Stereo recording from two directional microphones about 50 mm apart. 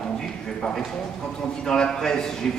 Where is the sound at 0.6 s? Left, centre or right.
Centre.